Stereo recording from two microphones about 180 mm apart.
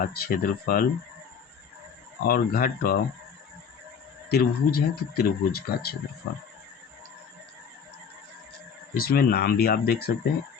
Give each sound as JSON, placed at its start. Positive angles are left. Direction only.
{"t": 0.0, "sound": "speech", "side_deg": 60}
{"t": 2.2, "sound": "speech", "side_deg": 55}
{"t": 4.3, "sound": "speech", "side_deg": 60}
{"t": 9.0, "sound": "speech", "side_deg": 55}